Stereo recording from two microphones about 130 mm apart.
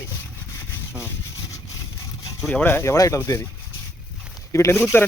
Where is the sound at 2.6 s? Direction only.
15° left (ahead or behind).